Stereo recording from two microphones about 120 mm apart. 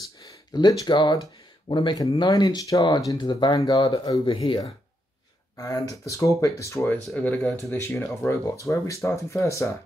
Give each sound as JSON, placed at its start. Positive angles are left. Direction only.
{"t": 0.2, "sound": "speech", "side_deg": 35}
{"t": 5.6, "sound": "speech", "side_deg": 30}
{"t": 7.2, "sound": "speech", "side_deg": 5}
{"t": 7.7, "sound": "speech", "side_deg": 15}